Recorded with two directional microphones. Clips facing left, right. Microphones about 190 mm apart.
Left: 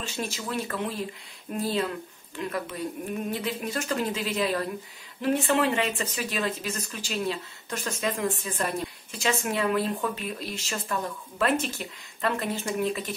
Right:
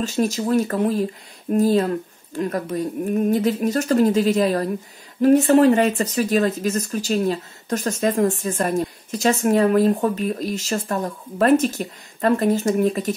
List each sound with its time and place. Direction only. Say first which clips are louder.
0.0 s speech: right 12 dB; 40° right (ahead or behind)